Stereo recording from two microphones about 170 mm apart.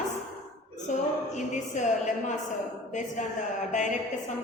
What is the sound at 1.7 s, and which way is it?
Speech, 45° left (ahead or behind).